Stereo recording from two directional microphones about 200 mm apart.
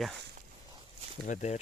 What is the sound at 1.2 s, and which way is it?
Speech, 40° left (ahead or behind).